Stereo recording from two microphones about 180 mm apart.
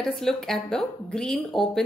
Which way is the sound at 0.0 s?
Centre (ahead or behind).